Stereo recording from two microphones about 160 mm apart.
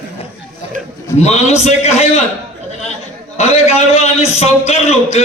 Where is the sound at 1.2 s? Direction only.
45° left (ahead or behind).